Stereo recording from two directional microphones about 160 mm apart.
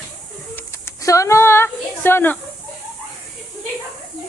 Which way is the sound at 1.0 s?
20° left (ahead or behind).